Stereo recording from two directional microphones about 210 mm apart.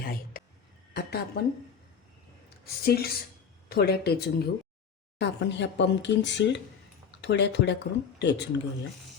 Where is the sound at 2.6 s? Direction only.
45° left (ahead or behind).